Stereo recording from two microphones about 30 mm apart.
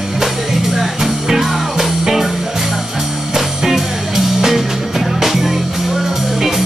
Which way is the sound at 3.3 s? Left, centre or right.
Centre.